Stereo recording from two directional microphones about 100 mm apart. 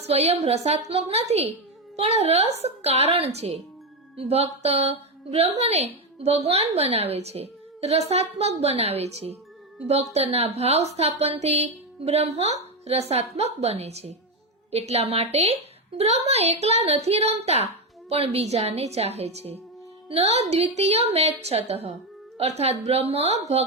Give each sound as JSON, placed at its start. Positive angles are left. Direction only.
{"t": 0.0, "sound": "a woman's voice", "side_deg": -90}